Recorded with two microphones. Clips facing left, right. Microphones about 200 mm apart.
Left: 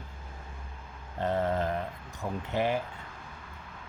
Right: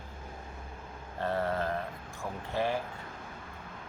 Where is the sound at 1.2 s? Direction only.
20° left (ahead or behind).